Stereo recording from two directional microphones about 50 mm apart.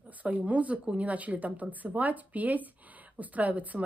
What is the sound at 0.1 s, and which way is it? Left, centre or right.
Speech, right.